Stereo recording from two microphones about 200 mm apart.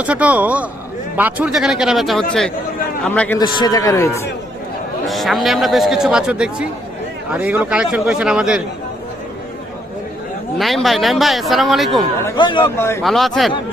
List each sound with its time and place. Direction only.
0.0 s a man's voice: 5° right (ahead or behind); by 4.3 s 15° left (ahead or behind)
5.0 s a man's voice: centre (ahead or behind)
10.6 s a man's voice: centre (ahead or behind)
12.2 s speech: 25° left (ahead or behind)
12.6 s a man's voice: 10° left (ahead or behind)
13.0 s a man's voice: centre (ahead or behind)